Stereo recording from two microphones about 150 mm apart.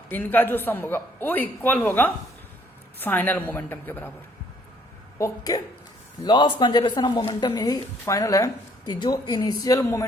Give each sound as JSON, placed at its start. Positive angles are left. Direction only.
{"t": 0.1, "sound": "a man's voice", "side_deg": 10}
{"t": 5.1, "sound": "a woman's voice", "side_deg": 20}